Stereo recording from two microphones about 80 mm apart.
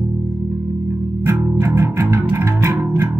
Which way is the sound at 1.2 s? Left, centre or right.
Right.